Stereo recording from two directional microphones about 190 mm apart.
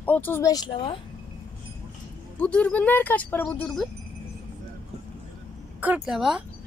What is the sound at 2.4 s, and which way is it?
Speech, 5° left (ahead or behind).